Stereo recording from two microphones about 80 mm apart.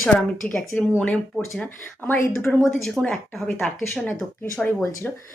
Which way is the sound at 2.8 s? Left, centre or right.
Centre.